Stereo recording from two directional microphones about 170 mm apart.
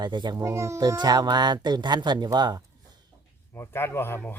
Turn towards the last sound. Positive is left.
turn(degrees=10)  # may be behind; listen again after turning